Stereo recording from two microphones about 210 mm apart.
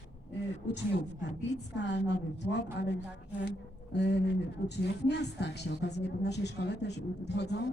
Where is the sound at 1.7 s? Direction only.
55° left (ahead or behind).